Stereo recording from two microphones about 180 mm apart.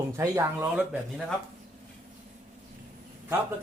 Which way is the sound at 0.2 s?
15° right (ahead or behind).